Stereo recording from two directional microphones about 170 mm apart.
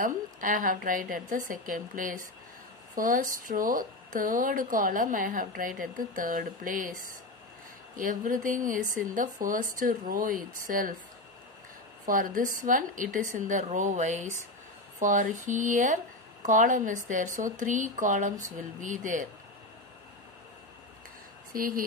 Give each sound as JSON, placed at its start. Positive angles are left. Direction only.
{"t": 0.0, "sound": "speech", "side_deg": -50}
{"t": 7.9, "sound": "speech", "side_deg": -55}
{"t": 12.1, "sound": "speech", "side_deg": -55}
{"t": 21.5, "sound": "speech", "side_deg": -55}